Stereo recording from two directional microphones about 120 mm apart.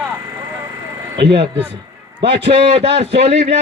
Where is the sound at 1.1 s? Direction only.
45° right (ahead or behind).